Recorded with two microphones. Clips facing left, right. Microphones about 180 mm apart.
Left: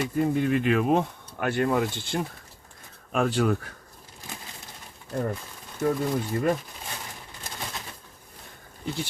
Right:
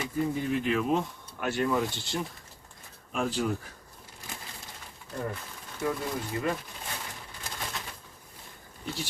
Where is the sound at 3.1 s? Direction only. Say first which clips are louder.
Left 6 dB; 65° left (ahead or behind).